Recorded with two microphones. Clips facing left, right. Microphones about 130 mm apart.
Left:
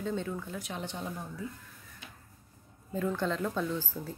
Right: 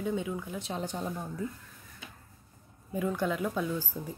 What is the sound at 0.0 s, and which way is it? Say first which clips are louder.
Speech: right 2 dB; 10° right (ahead or behind).